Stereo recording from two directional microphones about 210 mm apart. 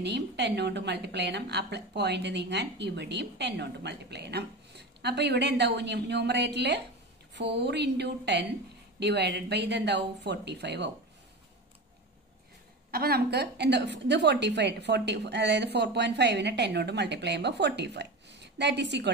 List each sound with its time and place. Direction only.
0.0 s a woman's voice: 55° right (ahead or behind)
12.9 s a woman's voice: 45° right (ahead or behind)